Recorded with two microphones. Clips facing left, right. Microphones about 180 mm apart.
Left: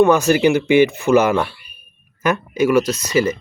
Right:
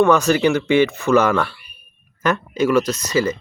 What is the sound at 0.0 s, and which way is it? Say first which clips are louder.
Speech: left 2 dB; 10° left (ahead or behind).